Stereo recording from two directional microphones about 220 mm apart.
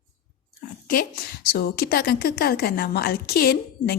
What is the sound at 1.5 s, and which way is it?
A woman's voice, 45° left (ahead or behind).